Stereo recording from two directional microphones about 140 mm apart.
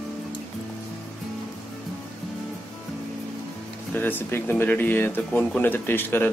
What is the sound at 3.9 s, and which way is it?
Speech, 15° left (ahead or behind).